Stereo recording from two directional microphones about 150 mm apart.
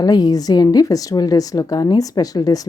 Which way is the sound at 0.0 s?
25° left (ahead or behind).